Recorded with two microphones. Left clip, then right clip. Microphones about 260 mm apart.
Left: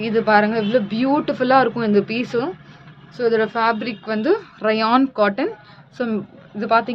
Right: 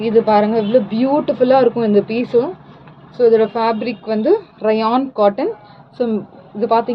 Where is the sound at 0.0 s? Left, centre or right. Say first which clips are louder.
Right 3 dB; left.